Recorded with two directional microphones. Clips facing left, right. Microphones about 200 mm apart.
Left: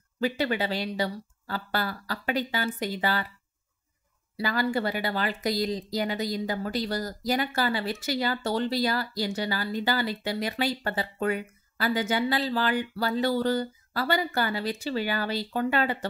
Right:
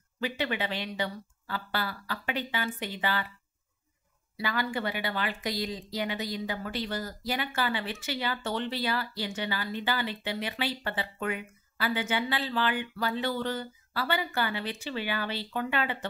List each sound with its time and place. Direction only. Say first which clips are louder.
0.2 s speech: left 5 dB; 40° left (ahead or behind)
4.4 s speech: left 5 dB; 40° left (ahead or behind)